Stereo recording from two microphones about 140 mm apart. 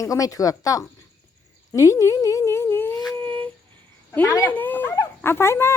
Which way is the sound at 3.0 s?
10° left (ahead or behind).